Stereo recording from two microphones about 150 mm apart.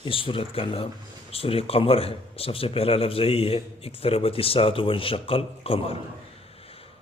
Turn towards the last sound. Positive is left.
turn(degrees=40)  # may be behind; listen again after turning